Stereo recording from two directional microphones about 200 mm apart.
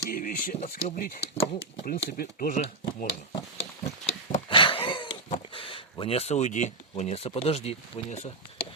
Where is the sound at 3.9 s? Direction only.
30° left (ahead or behind).